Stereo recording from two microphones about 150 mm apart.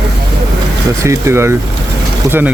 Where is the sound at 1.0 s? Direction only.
20° right (ahead or behind).